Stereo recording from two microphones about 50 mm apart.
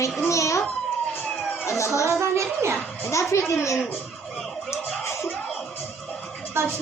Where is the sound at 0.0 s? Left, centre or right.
Left.